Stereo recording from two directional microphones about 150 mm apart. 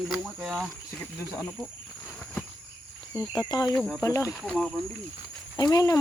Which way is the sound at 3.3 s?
25° left (ahead or behind).